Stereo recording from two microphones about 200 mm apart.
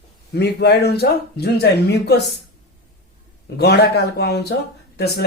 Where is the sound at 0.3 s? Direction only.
55° left (ahead or behind).